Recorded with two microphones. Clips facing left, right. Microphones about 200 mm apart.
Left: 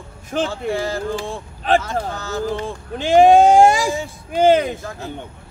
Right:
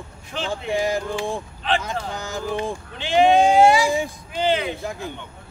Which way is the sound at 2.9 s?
45° left (ahead or behind).